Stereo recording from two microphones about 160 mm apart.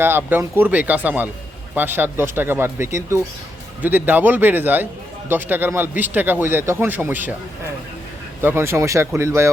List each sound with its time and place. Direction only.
0.0 s speech: 10° right (ahead or behind)
8.4 s speech: 15° right (ahead or behind)